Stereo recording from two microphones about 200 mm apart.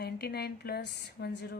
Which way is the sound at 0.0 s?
50° left (ahead or behind).